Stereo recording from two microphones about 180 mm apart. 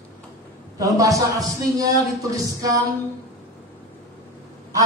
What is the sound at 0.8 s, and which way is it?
Speech, 20° right (ahead or behind).